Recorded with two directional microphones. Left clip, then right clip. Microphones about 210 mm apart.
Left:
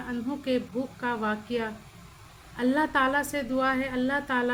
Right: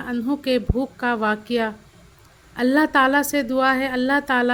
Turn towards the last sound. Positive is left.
turn(degrees=-40)  # may be behind; listen again after turning